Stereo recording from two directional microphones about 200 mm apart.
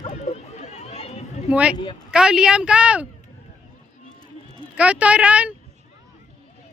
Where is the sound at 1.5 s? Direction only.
5° right (ahead or behind).